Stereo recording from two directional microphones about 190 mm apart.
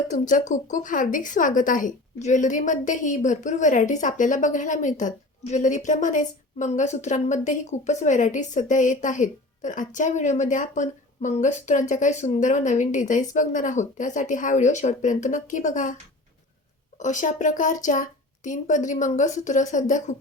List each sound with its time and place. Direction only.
0.1 s a woman's voice: 40° left (ahead or behind)
17.0 s a woman's voice: 40° left (ahead or behind)